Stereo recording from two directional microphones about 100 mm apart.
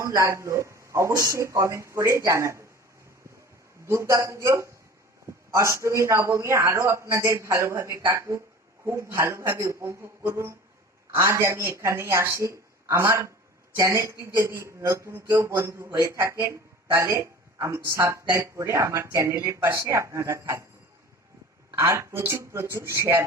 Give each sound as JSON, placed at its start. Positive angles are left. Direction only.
{"t": 0.0, "sound": "speech", "side_deg": -30}
{"t": 3.8, "sound": "speech", "side_deg": -30}
{"t": 21.7, "sound": "speech", "side_deg": -25}